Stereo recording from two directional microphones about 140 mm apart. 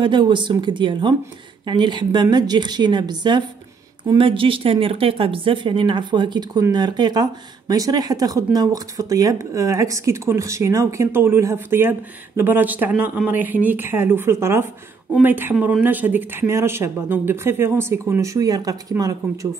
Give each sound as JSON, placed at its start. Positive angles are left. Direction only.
{"t": 0.0, "sound": "speech", "side_deg": -35}